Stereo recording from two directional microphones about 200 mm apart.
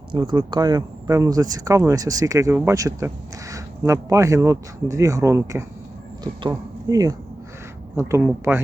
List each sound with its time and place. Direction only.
0.1 s speech: 20° right (ahead or behind)